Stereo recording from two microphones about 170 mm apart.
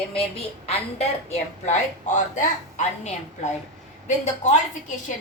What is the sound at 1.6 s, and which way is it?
A woman's voice, 45° left (ahead or behind).